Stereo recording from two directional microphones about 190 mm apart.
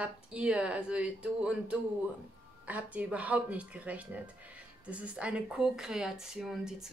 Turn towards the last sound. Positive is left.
turn(degrees=-5)  # may be behind; listen again after turning